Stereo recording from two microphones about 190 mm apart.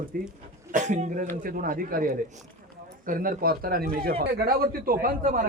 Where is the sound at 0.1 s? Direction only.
50° right (ahead or behind).